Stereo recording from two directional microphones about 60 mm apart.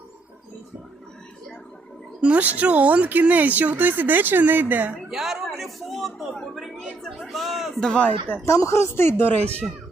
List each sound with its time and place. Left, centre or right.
2.2 s speech: right
5.0 s a man's voice: centre
7.8 s speech: centre
8.4 s speech: left